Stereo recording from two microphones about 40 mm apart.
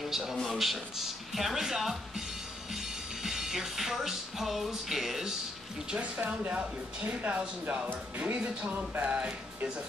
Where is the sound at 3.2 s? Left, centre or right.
Centre.